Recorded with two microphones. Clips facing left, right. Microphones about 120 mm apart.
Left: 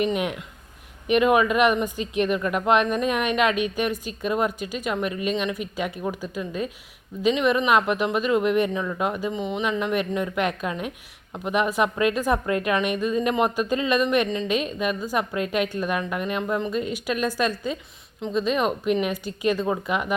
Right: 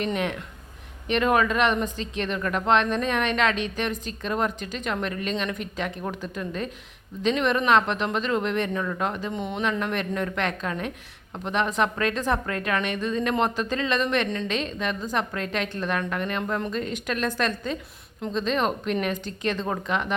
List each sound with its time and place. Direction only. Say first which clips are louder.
0.0 s speech: left 3 dB; 10° left (ahead or behind)